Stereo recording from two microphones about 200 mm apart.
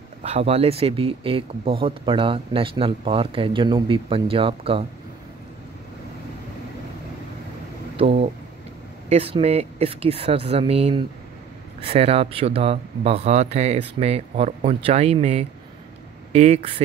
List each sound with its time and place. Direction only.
0.2 s speech: 30° right (ahead or behind)
8.0 s speech: 30° right (ahead or behind)